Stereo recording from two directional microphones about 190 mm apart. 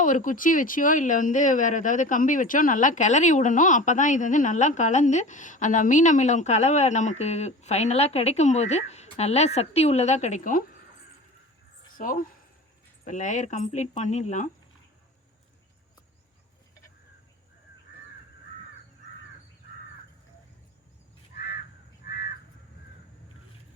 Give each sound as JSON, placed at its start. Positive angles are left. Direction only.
{"t": 0.0, "sound": "speech", "side_deg": 45}
{"t": 11.9, "sound": "speech", "side_deg": 45}
{"t": 21.3, "sound": "crow", "side_deg": 55}